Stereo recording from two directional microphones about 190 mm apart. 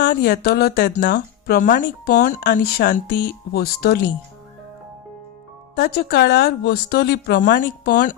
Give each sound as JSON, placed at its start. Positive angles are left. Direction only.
{"t": 0.1, "sound": "speech", "side_deg": 50}
{"t": 2.5, "sound": "speech", "side_deg": 55}
{"t": 5.7, "sound": "speech", "side_deg": 55}